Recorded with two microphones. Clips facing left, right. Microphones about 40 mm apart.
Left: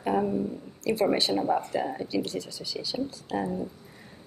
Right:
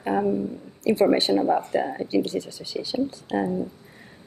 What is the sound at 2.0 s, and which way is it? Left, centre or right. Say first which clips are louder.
Speech: right 6 dB; right.